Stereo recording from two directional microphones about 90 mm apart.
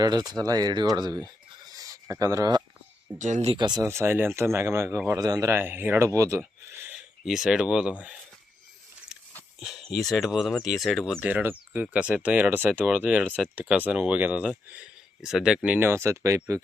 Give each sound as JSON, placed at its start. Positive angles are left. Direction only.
{"t": 0.0, "sound": "speech", "side_deg": -50}
{"t": 3.1, "sound": "speech", "side_deg": -55}
{"t": 3.8, "sound": "speech", "side_deg": -25}
{"t": 5.2, "sound": "speech", "side_deg": -45}
{"t": 5.5, "sound": "speech", "side_deg": -25}
{"t": 6.1, "sound": "speech", "side_deg": -35}
{"t": 6.9, "sound": "speech", "side_deg": -5}
{"t": 9.6, "sound": "speech", "side_deg": 0}
{"t": 11.2, "sound": "speech", "side_deg": -15}
{"t": 15.2, "sound": "speech", "side_deg": -5}
{"t": 15.9, "sound": "speech", "side_deg": -30}